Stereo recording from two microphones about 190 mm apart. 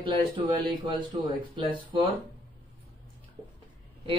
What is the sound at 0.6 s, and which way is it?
A man's voice, 25° right (ahead or behind).